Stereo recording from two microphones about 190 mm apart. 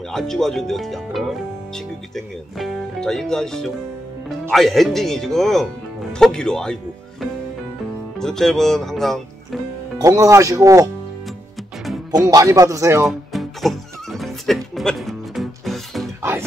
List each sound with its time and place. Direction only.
0.1 s speech: centre (ahead or behind)
9.9 s speech: 20° right (ahead or behind)
12.3 s speech: 20° right (ahead or behind)
13.3 s music: centre (ahead or behind)
16.2 s music: 15° right (ahead or behind)